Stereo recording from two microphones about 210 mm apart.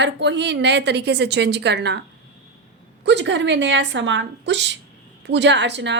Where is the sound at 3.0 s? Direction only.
60° right (ahead or behind).